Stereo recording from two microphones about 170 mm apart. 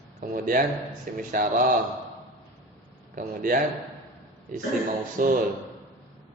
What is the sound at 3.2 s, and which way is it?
Speech, 55° right (ahead or behind).